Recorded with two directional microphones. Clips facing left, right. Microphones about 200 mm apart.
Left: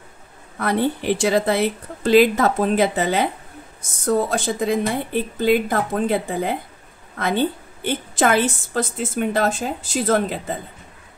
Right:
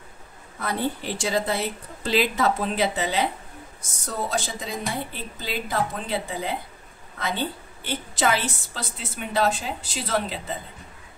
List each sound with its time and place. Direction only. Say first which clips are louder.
0.6 s a woman's voice: left 7 dB; 65° left (ahead or behind)